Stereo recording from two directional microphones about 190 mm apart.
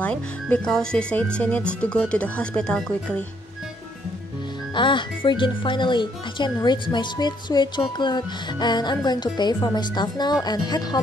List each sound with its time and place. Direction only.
0.0 s speech: 5° left (ahead or behind)
4.7 s speech: 25° left (ahead or behind)